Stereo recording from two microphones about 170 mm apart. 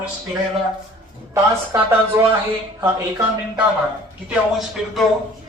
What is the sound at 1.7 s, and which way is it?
Speech, 15° right (ahead or behind).